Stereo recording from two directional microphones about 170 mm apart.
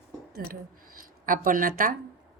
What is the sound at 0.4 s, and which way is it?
Speech, 60° right (ahead or behind).